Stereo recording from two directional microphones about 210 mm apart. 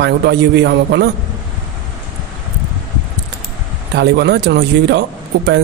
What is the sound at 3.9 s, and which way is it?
Speech, 55° right (ahead or behind).